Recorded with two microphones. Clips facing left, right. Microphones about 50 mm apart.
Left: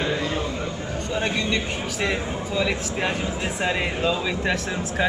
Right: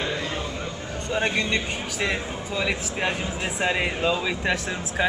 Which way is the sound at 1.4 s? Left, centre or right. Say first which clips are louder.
Even; right.